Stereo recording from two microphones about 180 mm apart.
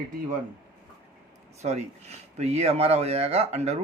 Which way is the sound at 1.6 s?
35° right (ahead or behind).